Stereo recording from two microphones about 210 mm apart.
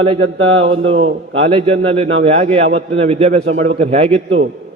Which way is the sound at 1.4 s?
25° right (ahead or behind).